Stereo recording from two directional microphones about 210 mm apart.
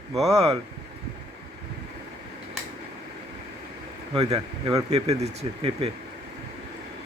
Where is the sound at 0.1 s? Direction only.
Centre (ahead or behind).